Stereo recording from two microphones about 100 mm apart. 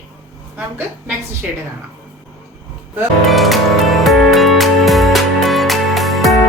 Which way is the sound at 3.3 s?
Centre (ahead or behind).